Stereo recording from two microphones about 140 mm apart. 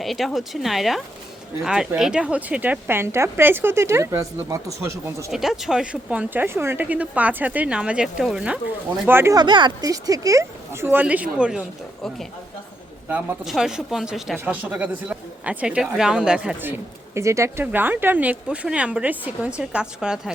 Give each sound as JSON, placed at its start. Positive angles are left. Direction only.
{"t": 0.0, "sound": "speech", "side_deg": 0}
{"t": 5.3, "sound": "speech", "side_deg": 0}
{"t": 9.0, "sound": "speech", "side_deg": -20}
{"t": 9.4, "sound": "speech", "side_deg": -30}
{"t": 10.8, "sound": "speech", "side_deg": -10}
{"t": 13.1, "sound": "speech", "side_deg": -15}
{"t": 13.4, "sound": "speech", "side_deg": -5}